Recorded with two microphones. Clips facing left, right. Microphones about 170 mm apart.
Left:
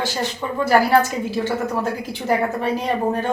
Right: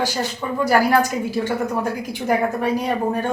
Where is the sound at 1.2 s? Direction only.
10° right (ahead or behind).